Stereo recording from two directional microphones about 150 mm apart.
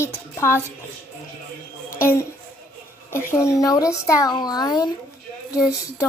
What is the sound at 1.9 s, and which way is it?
A child's voice, 20° left (ahead or behind).